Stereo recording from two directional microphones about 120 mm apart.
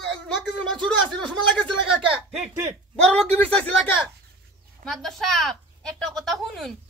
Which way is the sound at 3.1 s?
10° left (ahead or behind).